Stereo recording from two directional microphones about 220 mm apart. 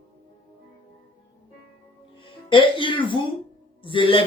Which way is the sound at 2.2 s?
25° left (ahead or behind).